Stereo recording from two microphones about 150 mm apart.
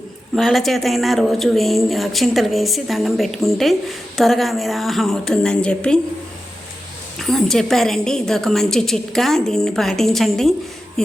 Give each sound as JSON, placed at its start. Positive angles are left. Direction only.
{"t": 0.3, "sound": "speech", "side_deg": 0}
{"t": 7.2, "sound": "speech", "side_deg": 0}